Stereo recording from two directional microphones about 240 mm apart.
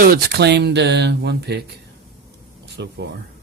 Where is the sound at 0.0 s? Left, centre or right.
Right.